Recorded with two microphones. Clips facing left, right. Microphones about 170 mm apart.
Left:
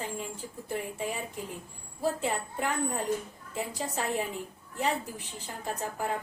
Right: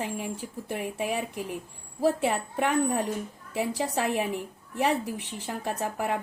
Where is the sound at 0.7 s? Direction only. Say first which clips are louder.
Right 3 dB; 70° right (ahead or behind).